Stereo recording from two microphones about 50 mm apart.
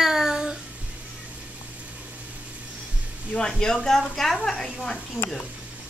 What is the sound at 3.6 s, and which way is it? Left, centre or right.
Speech, centre.